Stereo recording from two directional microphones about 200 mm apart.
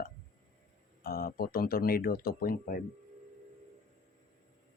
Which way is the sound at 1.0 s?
50° left (ahead or behind).